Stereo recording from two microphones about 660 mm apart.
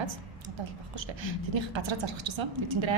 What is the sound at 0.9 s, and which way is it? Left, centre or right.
A woman's voice, right.